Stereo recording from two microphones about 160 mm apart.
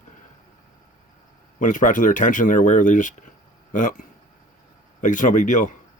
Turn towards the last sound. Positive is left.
turn(degrees=55)  # may be behind; listen again after turning